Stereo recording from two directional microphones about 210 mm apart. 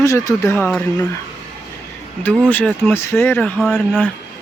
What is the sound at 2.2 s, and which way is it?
Speech, 10° left (ahead or behind).